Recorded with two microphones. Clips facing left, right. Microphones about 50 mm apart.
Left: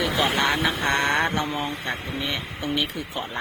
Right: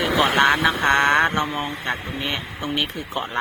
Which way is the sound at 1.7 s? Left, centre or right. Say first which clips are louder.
Right 2 dB; right.